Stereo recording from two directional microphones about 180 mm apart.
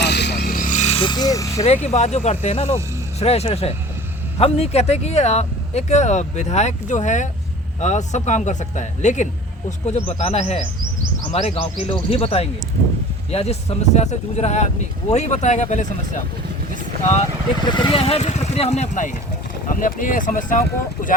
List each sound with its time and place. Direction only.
0.0 s vehicle: 70° left (ahead or behind)
0.5 s vehicle: 45° left (ahead or behind); by 1.6 s 15° left (ahead or behind)
1.6 s speech: 35° left (ahead or behind)
17.7 s speech: 25° left (ahead or behind); by 21.2 s 50° left (ahead or behind)